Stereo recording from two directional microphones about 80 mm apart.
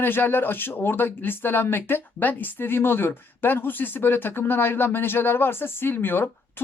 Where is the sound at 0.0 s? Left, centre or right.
Left.